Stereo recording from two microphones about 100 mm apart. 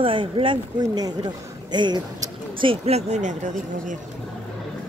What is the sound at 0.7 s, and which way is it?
Speech, 40° right (ahead or behind).